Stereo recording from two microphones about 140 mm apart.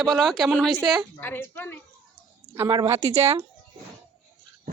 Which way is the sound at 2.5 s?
25° right (ahead or behind).